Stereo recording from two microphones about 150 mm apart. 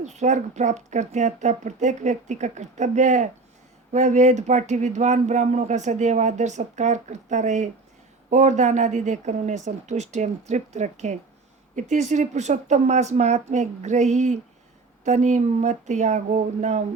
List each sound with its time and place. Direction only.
0.0 s speech: 50° right (ahead or behind)